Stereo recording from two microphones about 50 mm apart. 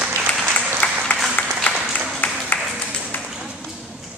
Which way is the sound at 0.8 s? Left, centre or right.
Left.